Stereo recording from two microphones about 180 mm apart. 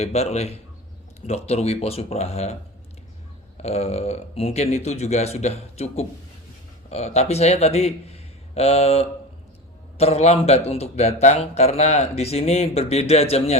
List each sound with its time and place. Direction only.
0.0 s speech: 40° left (ahead or behind)
3.6 s a man's voice: 35° left (ahead or behind)